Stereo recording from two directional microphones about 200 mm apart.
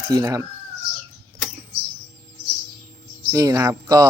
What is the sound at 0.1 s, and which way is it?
Speech, 15° right (ahead or behind).